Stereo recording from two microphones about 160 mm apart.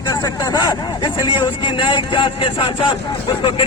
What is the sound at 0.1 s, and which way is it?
A man's voice, 25° left (ahead or behind).